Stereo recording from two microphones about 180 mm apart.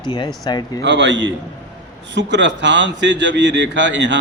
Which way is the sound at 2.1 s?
80° right.